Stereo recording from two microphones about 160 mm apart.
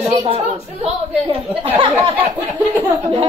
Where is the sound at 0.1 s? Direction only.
40° right (ahead or behind).